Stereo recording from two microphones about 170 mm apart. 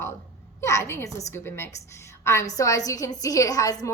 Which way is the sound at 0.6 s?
15° left (ahead or behind).